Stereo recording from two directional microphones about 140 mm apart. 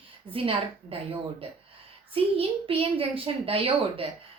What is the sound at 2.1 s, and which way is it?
A woman's voice, 40° right (ahead or behind).